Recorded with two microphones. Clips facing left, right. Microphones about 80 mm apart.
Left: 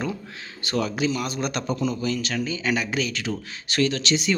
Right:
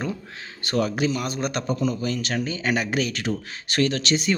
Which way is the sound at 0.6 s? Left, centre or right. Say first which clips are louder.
Right 1 dB; right.